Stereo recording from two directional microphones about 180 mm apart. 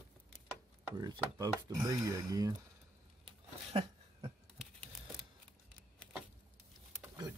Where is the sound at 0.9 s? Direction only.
20° right (ahead or behind).